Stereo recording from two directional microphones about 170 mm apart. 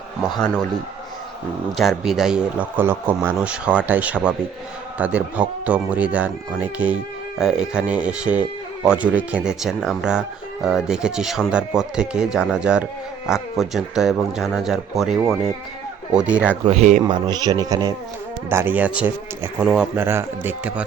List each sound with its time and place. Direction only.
0.3 s speech: 5° left (ahead or behind)
1.7 s a man's voice: centre (ahead or behind)
16.6 s speech: 40° right (ahead or behind)
17.1 s a man's voice: 25° right (ahead or behind); by 20.8 s 10° right (ahead or behind)